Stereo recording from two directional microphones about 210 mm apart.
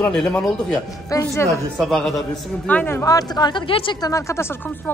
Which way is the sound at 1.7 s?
Centre (ahead or behind).